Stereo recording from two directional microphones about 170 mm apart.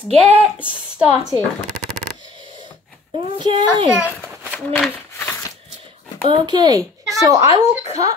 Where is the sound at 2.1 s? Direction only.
30° right (ahead or behind).